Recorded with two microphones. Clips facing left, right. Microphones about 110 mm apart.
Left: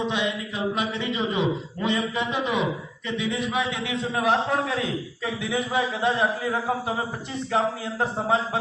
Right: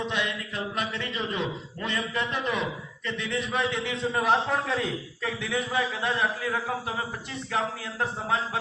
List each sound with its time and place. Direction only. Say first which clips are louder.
0.0 s a man's voice: left 4 dB; 20° left (ahead or behind)